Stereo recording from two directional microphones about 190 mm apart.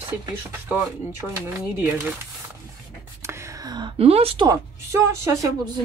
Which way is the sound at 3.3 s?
20° right (ahead or behind).